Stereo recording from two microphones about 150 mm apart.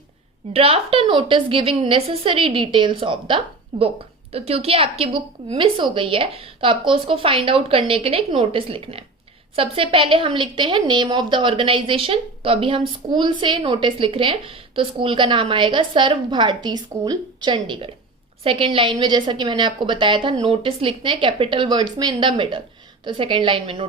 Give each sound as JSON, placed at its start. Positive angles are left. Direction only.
{"t": 0.5, "sound": "a woman's voice", "side_deg": -40}